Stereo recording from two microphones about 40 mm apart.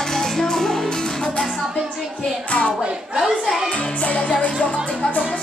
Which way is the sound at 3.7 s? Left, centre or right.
Left.